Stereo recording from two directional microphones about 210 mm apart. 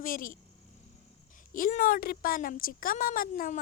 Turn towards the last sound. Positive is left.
turn(degrees=40)  # may be behind; listen again after turning